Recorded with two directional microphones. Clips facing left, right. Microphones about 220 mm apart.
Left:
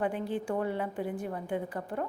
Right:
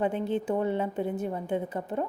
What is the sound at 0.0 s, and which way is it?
A woman's voice, 20° right (ahead or behind).